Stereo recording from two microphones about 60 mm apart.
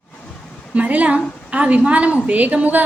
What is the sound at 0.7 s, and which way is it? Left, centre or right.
A woman's voice, right.